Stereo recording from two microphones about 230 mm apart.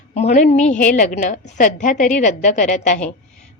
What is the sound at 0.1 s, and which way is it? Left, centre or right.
A woman's voice, left.